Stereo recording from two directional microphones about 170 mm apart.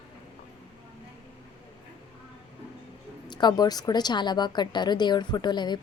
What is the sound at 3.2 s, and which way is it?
A woman's voice, 25° left (ahead or behind).